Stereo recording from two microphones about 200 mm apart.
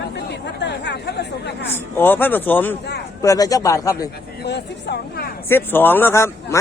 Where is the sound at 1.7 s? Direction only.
10° left (ahead or behind).